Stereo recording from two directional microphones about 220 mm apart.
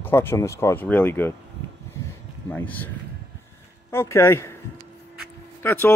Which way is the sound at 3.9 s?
10° left (ahead or behind).